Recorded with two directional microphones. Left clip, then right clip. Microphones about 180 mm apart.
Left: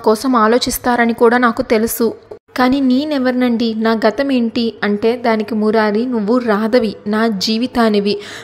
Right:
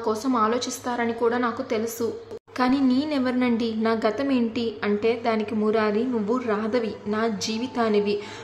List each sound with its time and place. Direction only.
0.0 s a woman's voice: 45° left (ahead or behind)